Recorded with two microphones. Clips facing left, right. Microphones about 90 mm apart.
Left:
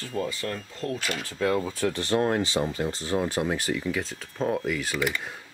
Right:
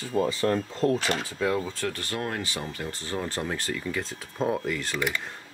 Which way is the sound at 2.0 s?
25° left (ahead or behind).